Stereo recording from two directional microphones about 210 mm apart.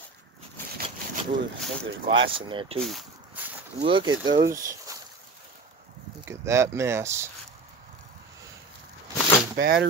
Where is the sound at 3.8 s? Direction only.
25° right (ahead or behind).